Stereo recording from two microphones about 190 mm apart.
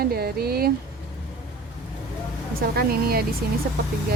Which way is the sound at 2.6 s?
55° right (ahead or behind).